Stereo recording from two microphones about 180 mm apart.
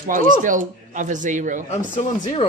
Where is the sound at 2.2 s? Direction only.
30° left (ahead or behind).